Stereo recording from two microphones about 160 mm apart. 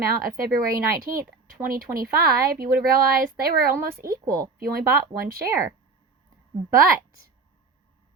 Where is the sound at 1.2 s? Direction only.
60° right (ahead or behind).